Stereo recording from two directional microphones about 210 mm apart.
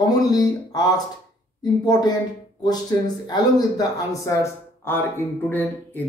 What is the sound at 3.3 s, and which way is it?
Speech, 15° left (ahead or behind).